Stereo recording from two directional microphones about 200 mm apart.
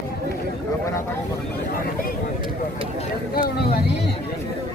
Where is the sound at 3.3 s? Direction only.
50° left (ahead or behind).